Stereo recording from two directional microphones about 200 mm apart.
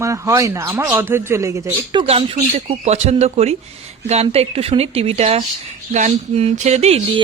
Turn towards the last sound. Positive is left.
turn(degrees=-30)  # may be behind; listen again after turning